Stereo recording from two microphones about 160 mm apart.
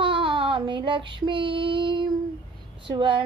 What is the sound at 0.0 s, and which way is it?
Child singing, 35° right (ahead or behind).